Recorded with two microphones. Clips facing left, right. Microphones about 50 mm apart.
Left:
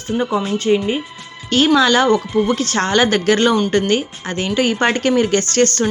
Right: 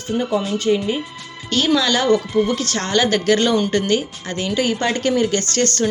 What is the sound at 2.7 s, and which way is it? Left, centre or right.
Speech, left.